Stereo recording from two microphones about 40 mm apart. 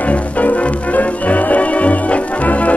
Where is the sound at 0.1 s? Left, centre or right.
Left.